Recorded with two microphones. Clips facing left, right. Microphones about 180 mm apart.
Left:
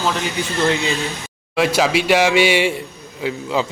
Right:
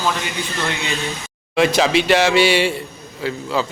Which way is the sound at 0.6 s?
35° left (ahead or behind).